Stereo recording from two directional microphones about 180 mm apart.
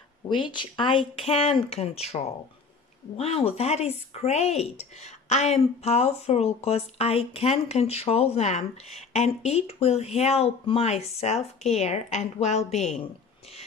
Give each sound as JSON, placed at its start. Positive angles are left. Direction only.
{"t": 0.3, "sound": "speech", "side_deg": 25}